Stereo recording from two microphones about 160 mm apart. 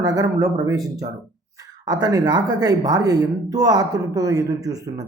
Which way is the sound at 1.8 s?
25° right (ahead or behind).